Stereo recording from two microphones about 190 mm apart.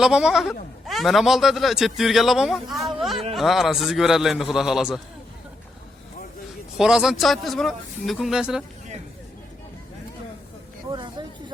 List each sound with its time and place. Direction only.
0.0 s speech: 5° right (ahead or behind)
6.7 s speech: 5° right (ahead or behind)
10.9 s a sound: 25° right (ahead or behind)